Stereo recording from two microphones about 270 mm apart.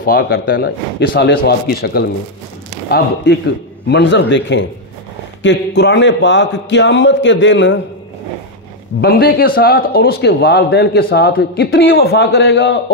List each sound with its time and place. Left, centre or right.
0.0 s a man's voice: left
9.0 s a man's voice: left